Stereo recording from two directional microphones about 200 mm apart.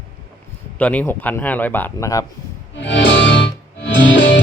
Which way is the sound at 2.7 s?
65° left (ahead or behind).